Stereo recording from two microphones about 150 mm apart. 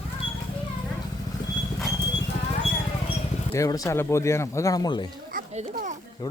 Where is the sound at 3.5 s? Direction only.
20° left (ahead or behind).